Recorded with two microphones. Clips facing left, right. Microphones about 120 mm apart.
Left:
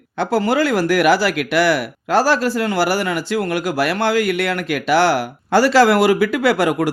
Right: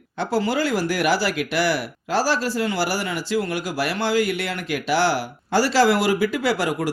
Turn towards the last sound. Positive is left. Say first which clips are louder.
# left 6 dB
turn(degrees=65)  # may be behind; listen again after turning